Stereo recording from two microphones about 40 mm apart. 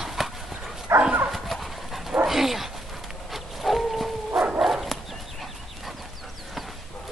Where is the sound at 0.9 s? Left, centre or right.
Right.